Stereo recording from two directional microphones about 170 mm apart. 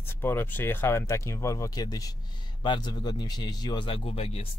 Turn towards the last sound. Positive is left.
turn(degrees=35)  # may be behind; listen again after turning